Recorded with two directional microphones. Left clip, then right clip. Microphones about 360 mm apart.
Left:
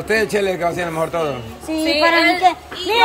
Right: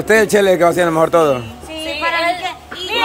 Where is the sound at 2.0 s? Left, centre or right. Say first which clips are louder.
Left 4 dB; left.